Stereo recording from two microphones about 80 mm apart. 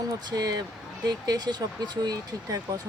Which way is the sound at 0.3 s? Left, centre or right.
Right.